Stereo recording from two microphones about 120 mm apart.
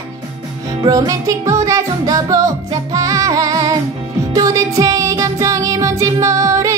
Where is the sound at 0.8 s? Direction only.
30° right (ahead or behind).